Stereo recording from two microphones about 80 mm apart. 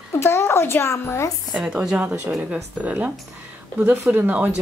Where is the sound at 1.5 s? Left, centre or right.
Centre.